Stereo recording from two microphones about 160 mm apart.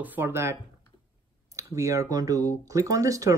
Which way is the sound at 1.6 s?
20° right (ahead or behind).